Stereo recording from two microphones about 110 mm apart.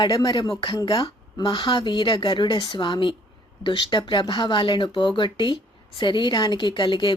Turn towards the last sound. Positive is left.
turn(degrees=50)  # may be behind; listen again after turning